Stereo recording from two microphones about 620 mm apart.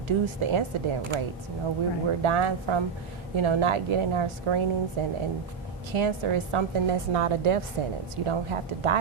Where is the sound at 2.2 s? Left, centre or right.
Right.